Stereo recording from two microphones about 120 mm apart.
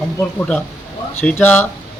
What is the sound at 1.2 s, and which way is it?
Speech, 15° left (ahead or behind).